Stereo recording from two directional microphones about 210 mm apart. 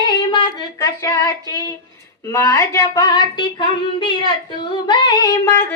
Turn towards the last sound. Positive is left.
turn(degrees=15)  # may be behind; listen again after turning